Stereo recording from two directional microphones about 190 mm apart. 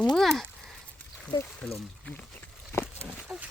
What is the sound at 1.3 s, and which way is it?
Speech, 15° left (ahead or behind).